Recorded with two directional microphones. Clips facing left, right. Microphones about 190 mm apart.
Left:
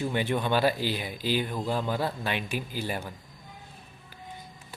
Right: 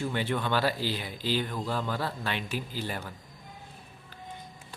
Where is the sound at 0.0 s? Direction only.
15° left (ahead or behind).